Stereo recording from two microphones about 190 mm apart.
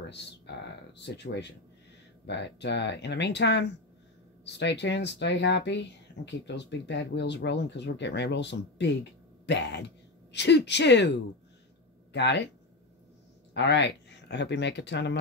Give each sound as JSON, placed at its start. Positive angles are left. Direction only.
{"t": 0.0, "sound": "speech", "side_deg": 65}
{"t": 12.1, "sound": "speech", "side_deg": 65}
{"t": 13.5, "sound": "speech", "side_deg": 65}